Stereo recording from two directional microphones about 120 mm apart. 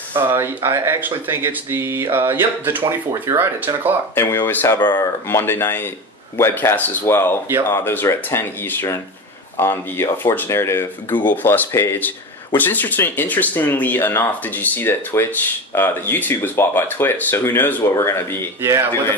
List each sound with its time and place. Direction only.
0.1 s speech: 20° right (ahead or behind)
4.1 s speech: 20° left (ahead or behind)
4.7 s speech: 35° left (ahead or behind)
5.3 s speech: 20° left (ahead or behind)
18.6 s speech: 20° right (ahead or behind)